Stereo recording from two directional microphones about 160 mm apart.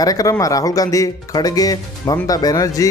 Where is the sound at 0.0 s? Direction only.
20° left (ahead or behind).